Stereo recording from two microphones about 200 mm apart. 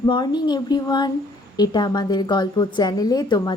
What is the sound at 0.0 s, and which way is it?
A woman's voice, 20° left (ahead or behind).